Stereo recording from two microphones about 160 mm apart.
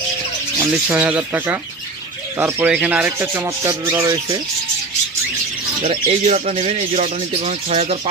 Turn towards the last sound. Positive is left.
turn(degrees=-45)  # may be behind; listen again after turning